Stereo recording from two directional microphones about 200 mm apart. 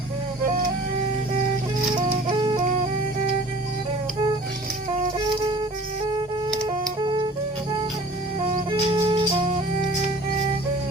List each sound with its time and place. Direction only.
7.0 s music: 25° right (ahead or behind)
8.7 s music: 25° right (ahead or behind)